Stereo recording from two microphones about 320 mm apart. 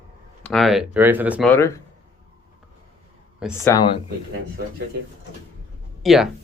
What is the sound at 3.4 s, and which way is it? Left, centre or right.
Speech, centre.